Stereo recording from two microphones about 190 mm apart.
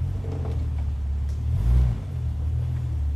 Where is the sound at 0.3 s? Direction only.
Centre (ahead or behind).